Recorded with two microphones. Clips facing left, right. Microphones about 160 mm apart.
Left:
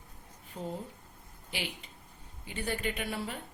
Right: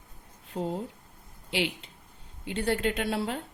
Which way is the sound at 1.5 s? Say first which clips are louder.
Right 9 dB; 75° right (ahead or behind).